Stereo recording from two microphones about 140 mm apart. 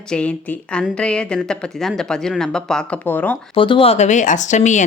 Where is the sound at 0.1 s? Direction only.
10° left (ahead or behind).